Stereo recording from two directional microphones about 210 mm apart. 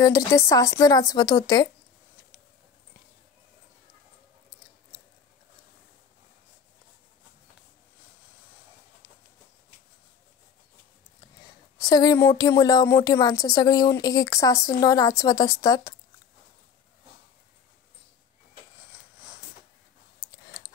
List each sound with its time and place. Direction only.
0.0 s speech: 15° left (ahead or behind)
11.8 s speech: 20° left (ahead or behind)